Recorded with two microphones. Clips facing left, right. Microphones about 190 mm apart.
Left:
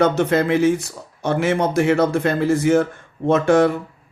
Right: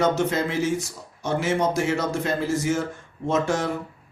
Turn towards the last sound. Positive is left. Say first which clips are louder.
# left 9 dB
turn(degrees=60)  # may be behind; listen again after turning